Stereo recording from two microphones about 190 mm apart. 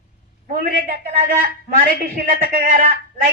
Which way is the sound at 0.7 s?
50° right (ahead or behind).